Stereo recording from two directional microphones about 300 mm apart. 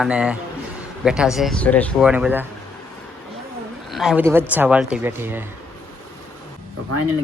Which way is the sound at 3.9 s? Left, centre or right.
Centre.